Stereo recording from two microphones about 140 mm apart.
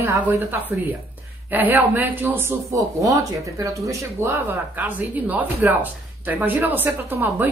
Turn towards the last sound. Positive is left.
turn(degrees=-15)  # may be behind; listen again after turning